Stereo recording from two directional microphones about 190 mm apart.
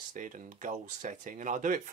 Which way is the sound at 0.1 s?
40° right (ahead or behind).